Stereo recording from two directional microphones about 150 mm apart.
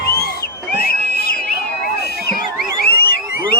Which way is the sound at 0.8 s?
90° left.